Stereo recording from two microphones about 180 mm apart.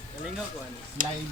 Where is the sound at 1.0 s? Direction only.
45° right (ahead or behind).